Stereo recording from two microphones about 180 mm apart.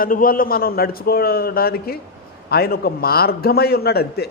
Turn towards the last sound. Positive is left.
turn(degrees=60)  # may be behind; listen again after turning